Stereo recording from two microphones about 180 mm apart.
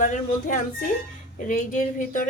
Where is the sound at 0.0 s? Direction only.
45° left (ahead or behind).